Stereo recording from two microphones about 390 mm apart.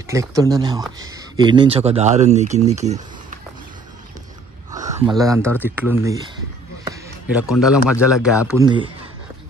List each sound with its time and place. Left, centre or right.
0.0 s speech: centre
4.9 s a man's voice: centre
6.8 s a sound: centre
7.6 s a man's voice: centre